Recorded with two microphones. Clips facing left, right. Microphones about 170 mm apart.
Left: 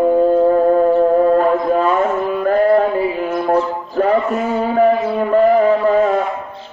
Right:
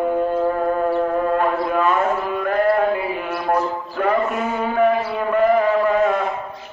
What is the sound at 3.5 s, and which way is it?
Music, 35° left (ahead or behind).